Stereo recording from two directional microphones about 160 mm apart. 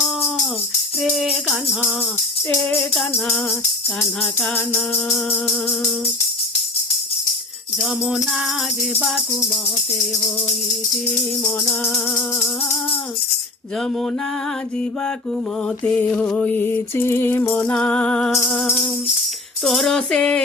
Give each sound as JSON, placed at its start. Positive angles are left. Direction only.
{"t": 1.1, "sound": "music", "side_deg": 0}
{"t": 2.5, "sound": "mantra", "side_deg": 15}
{"t": 4.2, "sound": "mantra", "side_deg": 10}
{"t": 7.8, "sound": "music", "side_deg": -5}
{"t": 15.8, "sound": "mantra", "side_deg": 10}
{"t": 19.6, "sound": "music", "side_deg": 0}